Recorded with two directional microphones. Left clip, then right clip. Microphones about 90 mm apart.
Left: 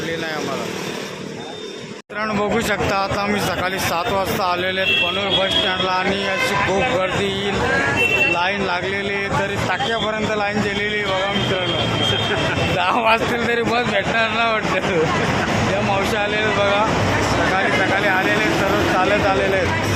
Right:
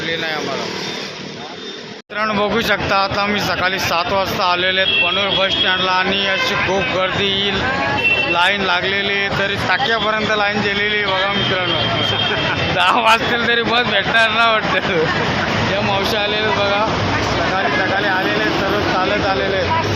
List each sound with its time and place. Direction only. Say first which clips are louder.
2.4 s speech: right 1 dB; 15° right (ahead or behind)
5.4 s speech: right 3 dB; 15° right (ahead or behind)
8.4 s speech: right 5 dB; 25° right (ahead or behind)
12.8 s speech: right 4 dB; 10° right (ahead or behind)
16.6 s speech: right 1 dB; 40° right (ahead or behind)
17.9 s speech: even; 15° right (ahead or behind)